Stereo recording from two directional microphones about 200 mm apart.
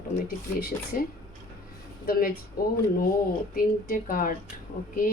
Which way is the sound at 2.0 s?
45° left (ahead or behind).